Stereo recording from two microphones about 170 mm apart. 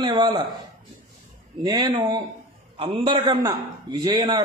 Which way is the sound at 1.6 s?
25° right (ahead or behind).